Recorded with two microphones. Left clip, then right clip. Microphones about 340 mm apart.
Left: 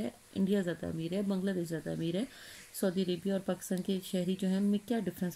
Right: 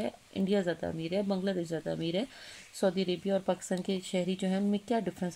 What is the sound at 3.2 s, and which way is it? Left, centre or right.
Speech, right.